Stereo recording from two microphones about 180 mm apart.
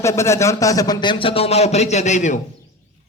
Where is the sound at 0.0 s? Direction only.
15° left (ahead or behind).